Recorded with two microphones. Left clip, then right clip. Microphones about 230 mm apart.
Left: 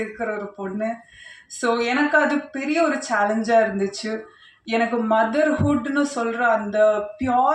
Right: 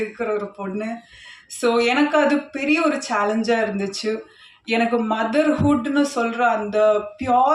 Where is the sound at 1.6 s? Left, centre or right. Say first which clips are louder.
Right 3 dB; right.